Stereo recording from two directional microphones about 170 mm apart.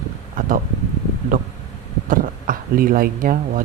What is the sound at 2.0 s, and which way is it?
Speech, 55° right (ahead or behind).